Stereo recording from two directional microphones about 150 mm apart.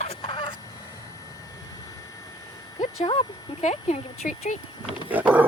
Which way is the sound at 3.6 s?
50° left (ahead or behind).